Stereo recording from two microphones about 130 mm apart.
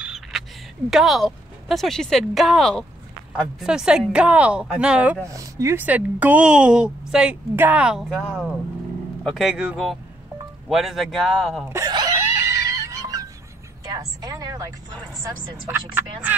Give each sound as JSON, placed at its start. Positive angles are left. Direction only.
{"t": 0.0, "sound": "speech", "side_deg": 0}
{"t": 5.2, "sound": "speech", "side_deg": -25}
{"t": 11.6, "sound": "speech", "side_deg": -20}
{"t": 11.9, "sound": "music", "side_deg": -30}
{"t": 13.9, "sound": "a sound", "side_deg": -30}
{"t": 15.7, "sound": "speech", "side_deg": -15}